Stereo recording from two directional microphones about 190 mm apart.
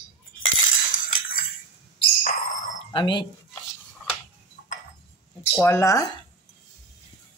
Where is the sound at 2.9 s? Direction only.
25° left (ahead or behind).